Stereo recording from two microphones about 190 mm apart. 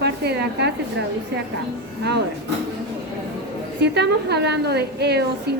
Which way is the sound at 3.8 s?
60° right (ahead or behind).